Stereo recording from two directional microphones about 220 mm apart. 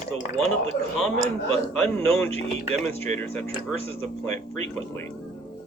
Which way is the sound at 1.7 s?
5° left (ahead or behind).